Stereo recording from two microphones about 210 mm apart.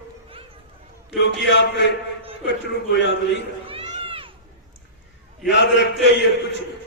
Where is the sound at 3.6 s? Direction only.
25° right (ahead or behind).